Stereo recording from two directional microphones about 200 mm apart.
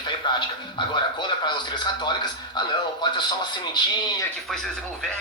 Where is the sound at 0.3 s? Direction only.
25° left (ahead or behind).